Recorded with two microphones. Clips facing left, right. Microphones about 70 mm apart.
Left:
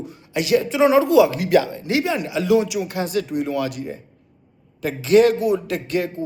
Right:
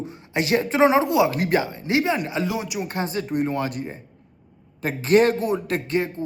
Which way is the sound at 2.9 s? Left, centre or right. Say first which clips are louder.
Left 3 dB; right.